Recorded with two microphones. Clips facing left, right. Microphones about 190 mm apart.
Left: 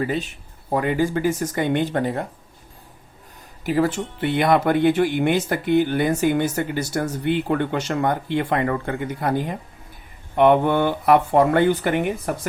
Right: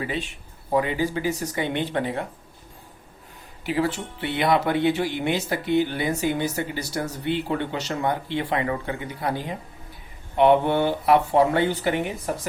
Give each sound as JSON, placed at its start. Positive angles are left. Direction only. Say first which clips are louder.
{"t": 0.0, "sound": "speech", "louder": "left 5 dB", "side_deg": 40}
{"t": 3.6, "sound": "speech", "louder": "left 4 dB", "side_deg": 45}